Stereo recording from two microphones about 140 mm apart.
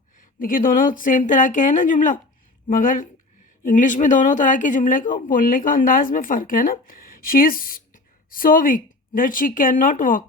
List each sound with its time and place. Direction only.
0.2 s speech: 75° left (ahead or behind)